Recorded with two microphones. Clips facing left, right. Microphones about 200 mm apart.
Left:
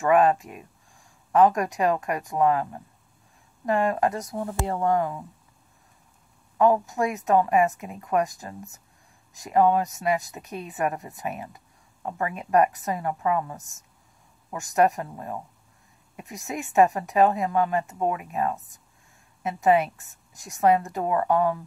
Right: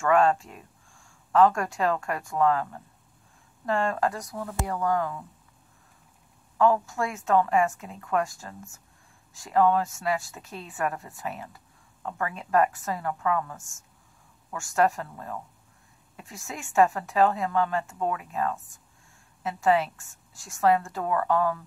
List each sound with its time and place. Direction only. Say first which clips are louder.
0.0 s a woman's voice: left 2 dB; 15° left (ahead or behind)
6.6 s a woman's voice: left 2 dB; 20° left (ahead or behind)